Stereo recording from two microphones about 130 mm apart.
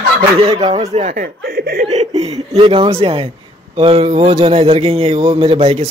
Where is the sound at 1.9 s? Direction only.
55° right (ahead or behind).